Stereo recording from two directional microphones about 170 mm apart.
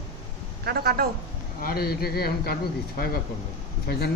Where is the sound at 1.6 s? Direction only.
65° left (ahead or behind).